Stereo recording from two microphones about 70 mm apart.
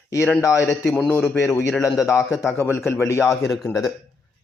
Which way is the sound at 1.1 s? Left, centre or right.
Left.